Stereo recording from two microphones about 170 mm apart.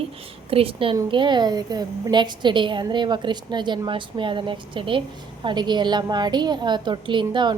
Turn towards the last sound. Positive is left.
turn(degrees=-25)  # may be behind; listen again after turning